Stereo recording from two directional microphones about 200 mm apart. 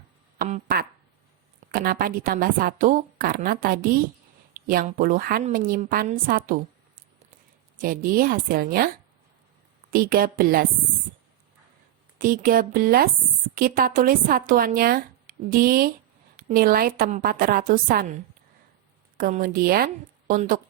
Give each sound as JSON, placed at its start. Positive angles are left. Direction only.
{"t": 1.7, "sound": "speech", "side_deg": -45}
{"t": 7.8, "sound": "speech", "side_deg": -45}
{"t": 9.9, "sound": "speech", "side_deg": -45}
{"t": 12.2, "sound": "speech", "side_deg": -45}
{"t": 19.1, "sound": "speech", "side_deg": -45}